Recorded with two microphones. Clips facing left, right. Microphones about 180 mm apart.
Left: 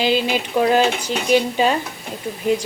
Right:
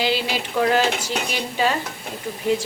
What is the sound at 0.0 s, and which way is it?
Speech, 20° left (ahead or behind).